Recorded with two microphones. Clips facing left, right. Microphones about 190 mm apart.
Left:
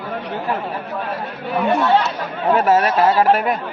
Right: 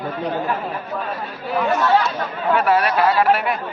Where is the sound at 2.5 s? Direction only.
40° left (ahead or behind).